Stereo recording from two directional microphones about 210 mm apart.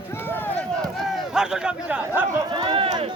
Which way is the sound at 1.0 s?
Centre (ahead or behind).